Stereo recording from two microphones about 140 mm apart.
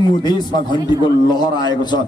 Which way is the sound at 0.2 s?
30° left (ahead or behind).